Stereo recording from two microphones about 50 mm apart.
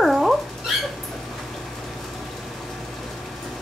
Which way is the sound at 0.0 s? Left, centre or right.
Centre.